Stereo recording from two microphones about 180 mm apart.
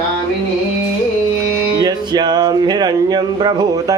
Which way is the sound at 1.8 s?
25° right (ahead or behind).